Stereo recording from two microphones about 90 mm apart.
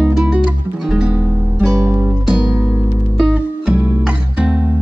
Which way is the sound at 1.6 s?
30° right (ahead or behind).